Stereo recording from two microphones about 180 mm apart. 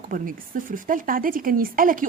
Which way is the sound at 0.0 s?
50° right (ahead or behind).